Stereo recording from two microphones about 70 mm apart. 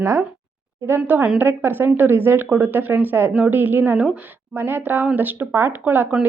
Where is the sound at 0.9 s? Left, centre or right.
Right.